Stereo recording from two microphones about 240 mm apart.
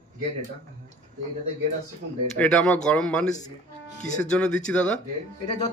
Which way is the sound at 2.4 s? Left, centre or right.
Centre.